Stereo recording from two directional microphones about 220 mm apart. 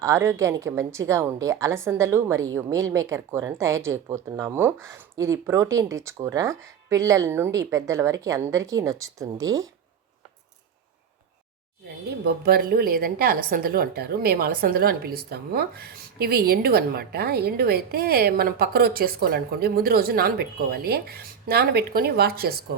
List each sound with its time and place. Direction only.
0.0 s speech: 10° right (ahead or behind)
12.2 s a woman's voice: 45° right (ahead or behind)